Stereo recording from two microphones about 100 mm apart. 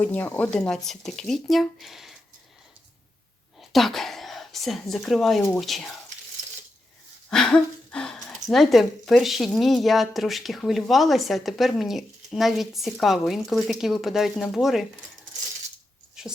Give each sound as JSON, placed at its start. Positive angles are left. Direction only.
{"t": 0.0, "sound": "speech", "side_deg": 15}
{"t": 0.5, "sound": "speech", "side_deg": 5}
{"t": 3.7, "sound": "speech", "side_deg": 0}
{"t": 7.3, "sound": "speech", "side_deg": 5}
{"t": 16.2, "sound": "a sound", "side_deg": -5}